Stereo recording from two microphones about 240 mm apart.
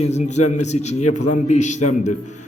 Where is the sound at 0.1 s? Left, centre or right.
Left.